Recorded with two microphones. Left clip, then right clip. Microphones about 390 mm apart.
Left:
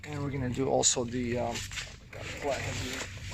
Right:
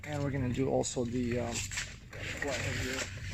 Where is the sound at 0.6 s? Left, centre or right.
Left.